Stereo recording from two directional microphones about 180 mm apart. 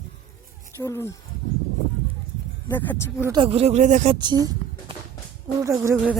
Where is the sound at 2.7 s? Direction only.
10° left (ahead or behind).